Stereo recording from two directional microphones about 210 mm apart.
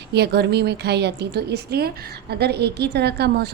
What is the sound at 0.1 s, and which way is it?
A woman's voice, 50° right (ahead or behind).